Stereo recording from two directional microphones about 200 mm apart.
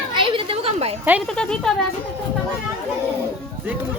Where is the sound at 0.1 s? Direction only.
25° right (ahead or behind).